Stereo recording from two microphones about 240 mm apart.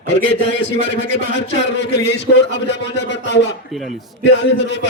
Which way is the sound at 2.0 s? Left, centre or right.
Left.